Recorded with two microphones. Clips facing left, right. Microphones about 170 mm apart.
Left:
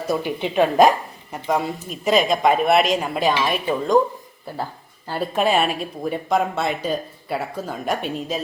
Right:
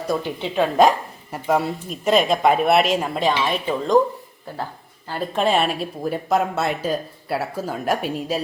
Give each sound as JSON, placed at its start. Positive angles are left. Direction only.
{"t": 0.2, "sound": "speech", "side_deg": 15}
{"t": 1.3, "sound": "speech", "side_deg": -5}
{"t": 5.0, "sound": "speech", "side_deg": 10}